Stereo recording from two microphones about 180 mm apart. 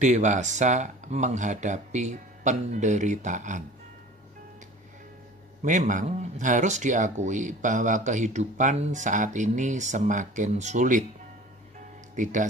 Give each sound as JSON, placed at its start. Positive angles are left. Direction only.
{"t": 0.0, "sound": "speech", "side_deg": -40}
{"t": 5.6, "sound": "speech", "side_deg": -40}
{"t": 12.2, "sound": "speech", "side_deg": -45}